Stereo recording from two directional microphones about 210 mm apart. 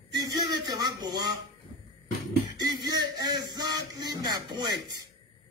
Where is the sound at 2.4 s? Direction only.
20° right (ahead or behind).